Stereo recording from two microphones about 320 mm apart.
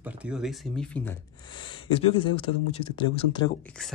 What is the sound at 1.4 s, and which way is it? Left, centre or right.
Speech, centre.